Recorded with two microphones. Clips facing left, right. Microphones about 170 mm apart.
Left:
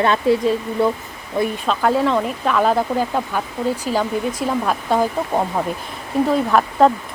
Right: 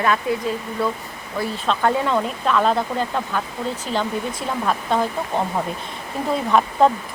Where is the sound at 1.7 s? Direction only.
5° left (ahead or behind).